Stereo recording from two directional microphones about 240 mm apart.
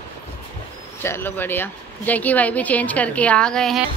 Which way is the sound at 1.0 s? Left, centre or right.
Centre.